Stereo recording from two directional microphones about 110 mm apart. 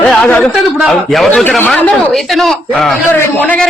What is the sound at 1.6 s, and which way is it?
Speech, 15° left (ahead or behind).